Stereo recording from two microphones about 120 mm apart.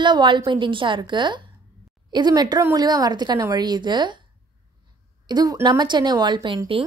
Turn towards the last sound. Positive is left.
turn(degrees=-45)  # may be behind; listen again after turning